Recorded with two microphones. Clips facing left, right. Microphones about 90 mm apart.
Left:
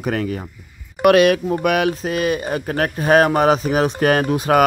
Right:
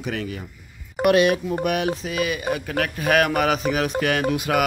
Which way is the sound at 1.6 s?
90° left.